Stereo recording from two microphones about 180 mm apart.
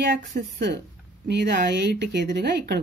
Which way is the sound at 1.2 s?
70° right (ahead or behind).